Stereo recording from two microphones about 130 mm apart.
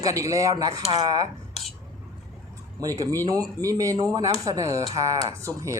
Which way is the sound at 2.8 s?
25° right (ahead or behind).